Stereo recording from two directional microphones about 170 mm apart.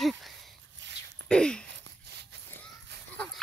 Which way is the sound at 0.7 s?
90° right.